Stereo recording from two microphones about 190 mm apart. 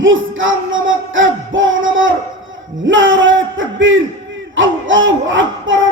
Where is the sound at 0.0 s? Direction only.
90° right.